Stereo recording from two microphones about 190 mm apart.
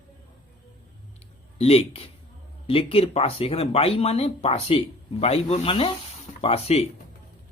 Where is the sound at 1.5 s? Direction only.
30° left (ahead or behind).